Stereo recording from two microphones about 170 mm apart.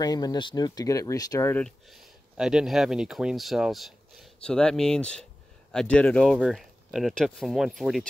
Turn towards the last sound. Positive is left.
turn(degrees=0)  # may be behind; listen again after turning